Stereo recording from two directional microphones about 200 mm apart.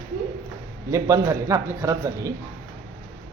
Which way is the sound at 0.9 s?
15° right (ahead or behind).